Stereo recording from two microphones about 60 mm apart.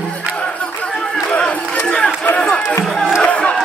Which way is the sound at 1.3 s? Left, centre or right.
Centre.